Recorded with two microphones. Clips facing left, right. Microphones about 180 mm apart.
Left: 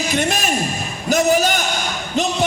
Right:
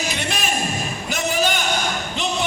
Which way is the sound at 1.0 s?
40° left (ahead or behind).